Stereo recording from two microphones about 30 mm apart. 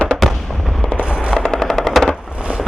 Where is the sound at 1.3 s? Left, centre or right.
Centre.